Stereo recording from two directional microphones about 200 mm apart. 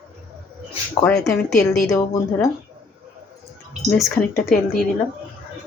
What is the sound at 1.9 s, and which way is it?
Speech, 15° left (ahead or behind).